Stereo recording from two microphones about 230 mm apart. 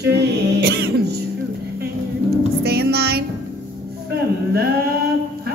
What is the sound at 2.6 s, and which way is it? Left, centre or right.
Music, right.